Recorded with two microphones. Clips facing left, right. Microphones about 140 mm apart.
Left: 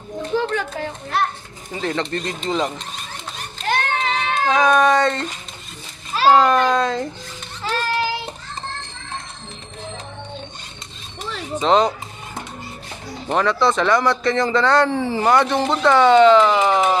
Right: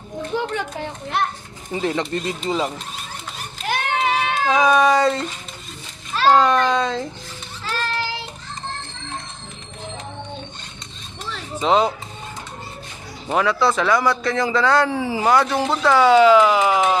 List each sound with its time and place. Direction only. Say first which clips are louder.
0.4 s a child's voice: left 2 dB; 20° right (ahead or behind)
3.6 s a sound: even; 10° right (ahead or behind)
6.1 s a man's voice: left 1 dB; 5° left (ahead or behind)
11.6 s a man's voice: left 1 dB; 5° right (ahead or behind)
13.3 s a man's voice: left 1 dB; 5° right (ahead or behind)